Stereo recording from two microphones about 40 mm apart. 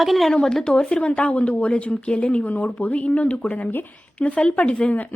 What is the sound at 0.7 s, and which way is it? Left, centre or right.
A woman's voice, left.